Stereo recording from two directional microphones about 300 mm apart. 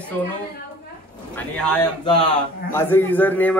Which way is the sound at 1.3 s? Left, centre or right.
Centre.